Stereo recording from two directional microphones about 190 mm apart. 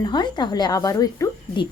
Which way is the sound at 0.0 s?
20° left (ahead or behind).